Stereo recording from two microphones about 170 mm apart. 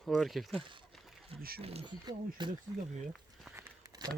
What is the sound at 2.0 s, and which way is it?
Speech, 25° right (ahead or behind).